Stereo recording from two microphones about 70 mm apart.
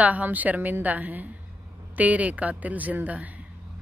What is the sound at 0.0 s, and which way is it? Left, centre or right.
Speech, right.